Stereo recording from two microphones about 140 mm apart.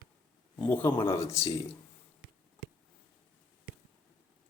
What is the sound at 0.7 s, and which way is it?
Speech, 15° left (ahead or behind).